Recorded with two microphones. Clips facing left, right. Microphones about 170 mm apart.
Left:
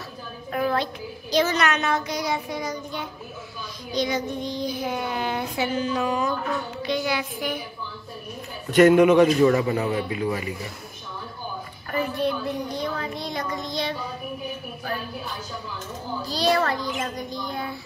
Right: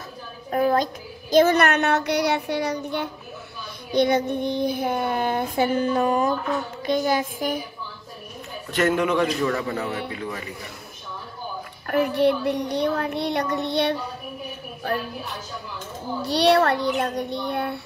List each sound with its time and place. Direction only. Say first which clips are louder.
0.5 s a sound: right 4 dB; 40° right (ahead or behind)
1.3 s a child's voice: right 5 dB; 55° right (ahead or behind)
3.9 s child singing: right 6 dB; 60° right (ahead or behind)
8.7 s a man's voice: left 7 dB; 15° left (ahead or behind)
11.9 s a child's voice: right 5 dB; 70° right (ahead or behind)
16.3 s a child's voice: right 5 dB; 70° right (ahead or behind)